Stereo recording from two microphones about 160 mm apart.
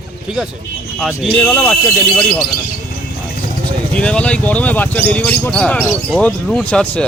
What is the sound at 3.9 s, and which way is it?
Speech, 5° left (ahead or behind).